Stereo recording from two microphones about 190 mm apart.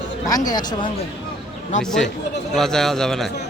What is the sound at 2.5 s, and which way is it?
Speech, centre (ahead or behind).